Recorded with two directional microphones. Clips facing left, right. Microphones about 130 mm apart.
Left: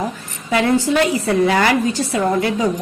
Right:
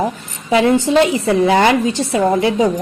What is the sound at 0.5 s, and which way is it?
A woman's voice, 25° right (ahead or behind).